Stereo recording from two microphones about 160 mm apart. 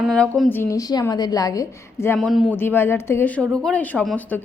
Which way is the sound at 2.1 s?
Centre (ahead or behind).